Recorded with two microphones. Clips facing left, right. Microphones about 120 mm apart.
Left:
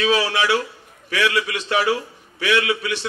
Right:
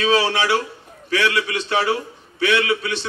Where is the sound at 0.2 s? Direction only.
25° right (ahead or behind).